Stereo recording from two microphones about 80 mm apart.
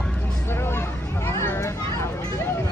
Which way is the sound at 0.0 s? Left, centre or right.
Centre.